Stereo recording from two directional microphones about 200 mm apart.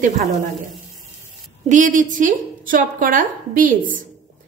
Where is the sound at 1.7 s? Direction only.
40° right (ahead or behind).